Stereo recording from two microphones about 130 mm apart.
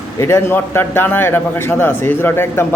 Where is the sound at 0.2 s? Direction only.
20° left (ahead or behind).